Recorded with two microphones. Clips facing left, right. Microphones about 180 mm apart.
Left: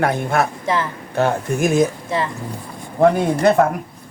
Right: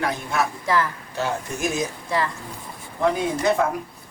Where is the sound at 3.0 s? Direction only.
60° left (ahead or behind).